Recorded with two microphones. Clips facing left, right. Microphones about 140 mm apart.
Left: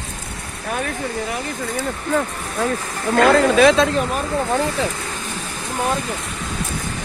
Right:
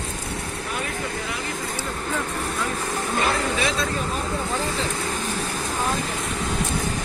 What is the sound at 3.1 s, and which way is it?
Speech, 80° left.